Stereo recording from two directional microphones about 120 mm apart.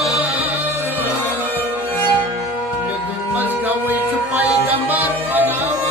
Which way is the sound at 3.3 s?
15° right (ahead or behind).